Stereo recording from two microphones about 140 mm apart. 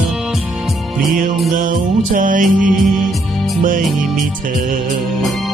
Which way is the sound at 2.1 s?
70° right (ahead or behind).